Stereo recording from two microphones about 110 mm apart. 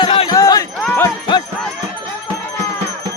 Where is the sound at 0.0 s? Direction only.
50° left (ahead or behind).